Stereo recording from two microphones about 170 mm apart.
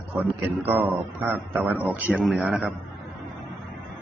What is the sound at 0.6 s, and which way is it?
A man's voice, 10° right (ahead or behind).